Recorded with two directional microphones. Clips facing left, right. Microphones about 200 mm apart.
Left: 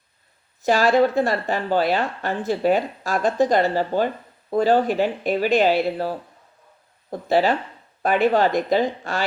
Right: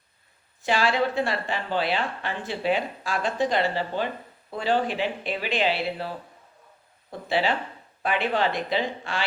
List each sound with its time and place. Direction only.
0.6 s speech: 45° left (ahead or behind)